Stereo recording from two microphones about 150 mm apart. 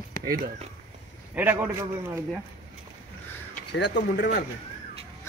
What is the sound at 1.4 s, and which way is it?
Speech, 15° right (ahead or behind).